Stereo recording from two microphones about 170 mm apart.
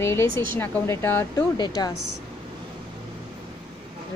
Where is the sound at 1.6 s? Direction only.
25° left (ahead or behind).